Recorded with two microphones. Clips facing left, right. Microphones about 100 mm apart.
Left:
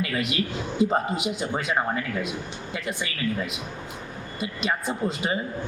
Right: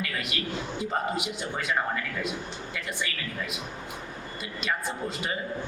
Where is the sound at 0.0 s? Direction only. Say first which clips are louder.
Left 6 dB; 25° left (ahead or behind).